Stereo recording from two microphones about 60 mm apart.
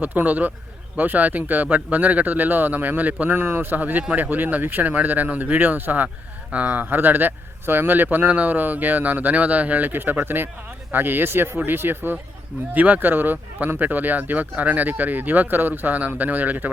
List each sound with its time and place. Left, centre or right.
0.0 s speech: right